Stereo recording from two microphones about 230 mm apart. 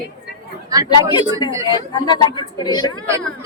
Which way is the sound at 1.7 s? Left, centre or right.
Centre.